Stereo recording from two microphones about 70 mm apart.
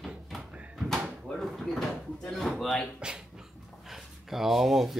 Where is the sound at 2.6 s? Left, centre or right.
Centre.